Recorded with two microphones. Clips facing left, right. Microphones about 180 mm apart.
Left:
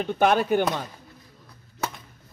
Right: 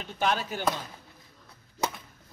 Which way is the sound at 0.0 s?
55° left (ahead or behind).